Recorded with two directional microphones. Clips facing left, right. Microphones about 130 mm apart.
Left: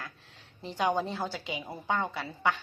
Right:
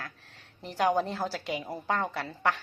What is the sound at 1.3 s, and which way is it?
Speech, 90° right.